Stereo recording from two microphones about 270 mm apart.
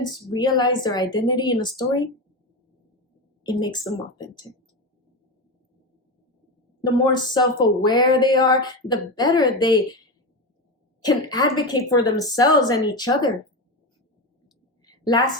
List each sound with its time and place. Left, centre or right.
0.0 s speech: centre
3.5 s speech: centre
6.8 s speech: centre
11.0 s speech: centre
14.8 s a sound: centre